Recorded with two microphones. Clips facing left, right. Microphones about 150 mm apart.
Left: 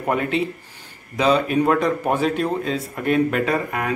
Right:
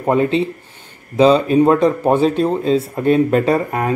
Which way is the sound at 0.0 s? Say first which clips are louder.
Right 6 dB; 25° right (ahead or behind).